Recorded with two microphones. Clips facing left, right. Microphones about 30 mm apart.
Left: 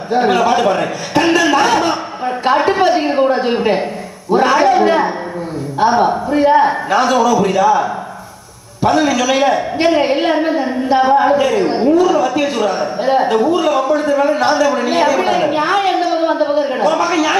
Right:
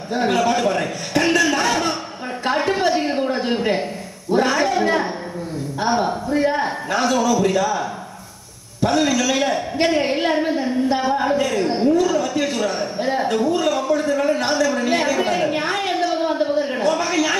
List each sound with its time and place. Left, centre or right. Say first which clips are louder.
0.1 s a woman's voice: left 6 dB; left
3.1 s a woman's voice: left 7 dB; centre
4.3 s a man's voice: left 7 dB; left
6.2 s a woman's voice: left 8 dB; left